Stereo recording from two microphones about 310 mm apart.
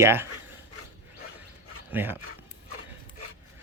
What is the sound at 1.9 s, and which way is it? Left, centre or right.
Speech, centre.